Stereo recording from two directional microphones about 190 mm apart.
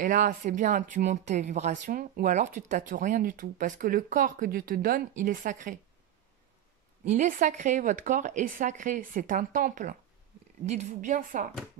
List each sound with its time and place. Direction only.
0.0 s speech: 45° right (ahead or behind)
7.1 s a woman's voice: 40° right (ahead or behind)